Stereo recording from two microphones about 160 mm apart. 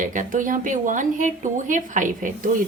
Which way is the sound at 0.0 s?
55° right (ahead or behind).